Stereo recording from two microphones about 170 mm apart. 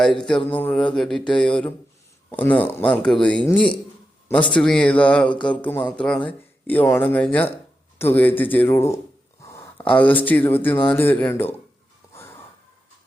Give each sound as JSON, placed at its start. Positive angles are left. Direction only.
{"t": 0.0, "sound": "a man's voice", "side_deg": 5}
{"t": 9.4, "sound": "a sound", "side_deg": 15}
{"t": 9.9, "sound": "speech", "side_deg": 10}
{"t": 12.1, "sound": "wheeze", "side_deg": 15}